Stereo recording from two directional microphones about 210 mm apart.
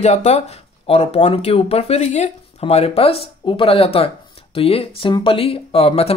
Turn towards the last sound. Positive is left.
turn(degrees=25)  # may be behind; listen again after turning